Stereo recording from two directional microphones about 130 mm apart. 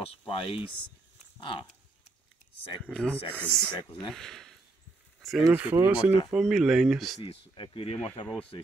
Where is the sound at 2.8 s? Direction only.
10° left (ahead or behind).